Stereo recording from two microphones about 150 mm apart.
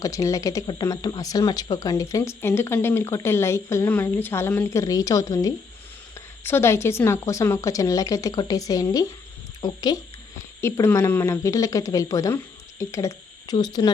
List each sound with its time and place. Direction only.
0.0 s speech: 20° left (ahead or behind)